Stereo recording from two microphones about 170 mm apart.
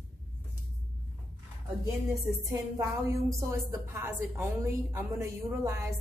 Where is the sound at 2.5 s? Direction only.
15° right (ahead or behind).